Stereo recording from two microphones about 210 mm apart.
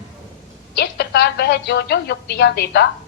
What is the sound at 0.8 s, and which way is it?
A woman's voice, 50° left (ahead or behind).